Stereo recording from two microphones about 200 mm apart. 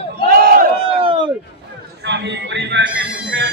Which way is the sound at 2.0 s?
60° right (ahead or behind).